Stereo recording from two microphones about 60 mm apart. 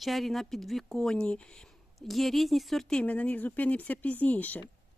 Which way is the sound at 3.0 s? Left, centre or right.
Left.